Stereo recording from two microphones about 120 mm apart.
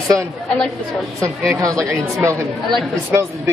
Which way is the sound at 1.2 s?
25° right (ahead or behind).